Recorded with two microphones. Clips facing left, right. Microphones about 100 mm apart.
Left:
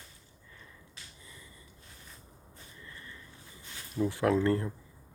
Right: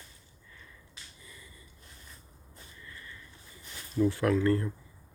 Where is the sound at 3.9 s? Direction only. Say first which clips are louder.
Right 1 dB; 15° left (ahead or behind).